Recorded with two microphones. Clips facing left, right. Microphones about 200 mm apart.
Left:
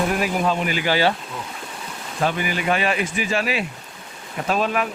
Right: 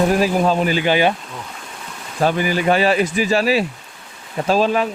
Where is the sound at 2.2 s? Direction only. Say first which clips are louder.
Right 5 dB; 35° right (ahead or behind).